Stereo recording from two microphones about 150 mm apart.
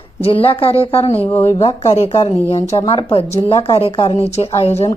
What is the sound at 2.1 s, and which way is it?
A woman's voice, 25° left (ahead or behind).